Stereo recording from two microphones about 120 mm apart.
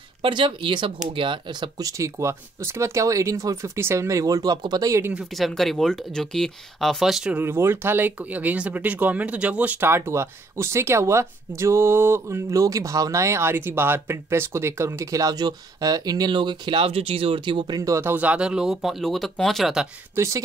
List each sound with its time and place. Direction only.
0.2 s speech: 45° right (ahead or behind); by 5.1 s 25° right (ahead or behind)
5.1 s speech: centre (ahead or behind)
7.3 s speech: 20° right (ahead or behind)
18.1 s speech: 10° right (ahead or behind)
20.2 s speech: 25° right (ahead or behind)